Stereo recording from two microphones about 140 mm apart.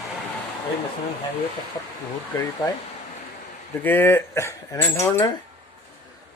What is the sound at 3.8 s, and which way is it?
Speech, 15° left (ahead or behind).